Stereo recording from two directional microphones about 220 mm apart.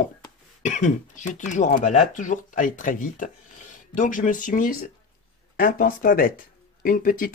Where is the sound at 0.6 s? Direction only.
35° left (ahead or behind).